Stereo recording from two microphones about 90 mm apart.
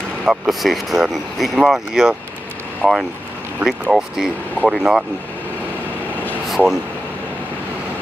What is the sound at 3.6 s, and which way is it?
Speech, 5° right (ahead or behind).